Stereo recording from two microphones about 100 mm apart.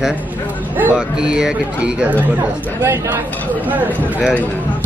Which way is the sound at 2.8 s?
25° right (ahead or behind).